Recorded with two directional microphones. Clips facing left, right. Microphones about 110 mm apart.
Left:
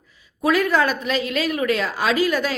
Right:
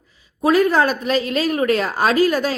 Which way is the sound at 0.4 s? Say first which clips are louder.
Right 3 dB; 35° right (ahead or behind).